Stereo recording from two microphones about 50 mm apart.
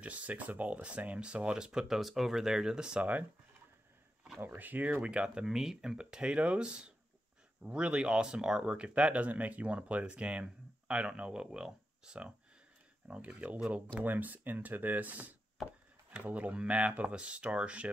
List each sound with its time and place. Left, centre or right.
0.0 s speech: right; by 2.0 s centre
2.0 s speech: centre
3.0 s speech: right
4.4 s speech: right